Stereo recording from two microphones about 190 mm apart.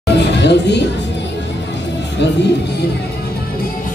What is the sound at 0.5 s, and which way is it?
Speech, 65° left (ahead or behind).